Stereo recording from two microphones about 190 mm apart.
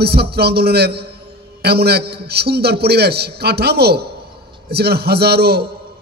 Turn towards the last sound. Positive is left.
turn(degrees=-55)  # may be behind; listen again after turning